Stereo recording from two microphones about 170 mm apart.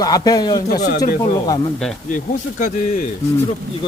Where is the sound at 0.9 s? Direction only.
60° left (ahead or behind).